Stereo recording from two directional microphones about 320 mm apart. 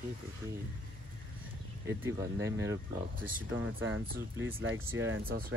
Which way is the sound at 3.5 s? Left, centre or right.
Right.